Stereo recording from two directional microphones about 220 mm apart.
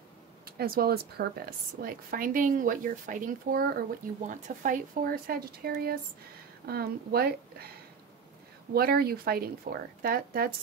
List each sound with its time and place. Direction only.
0.5 s a woman's voice: 45° right (ahead or behind)
8.7 s speech: 45° right (ahead or behind)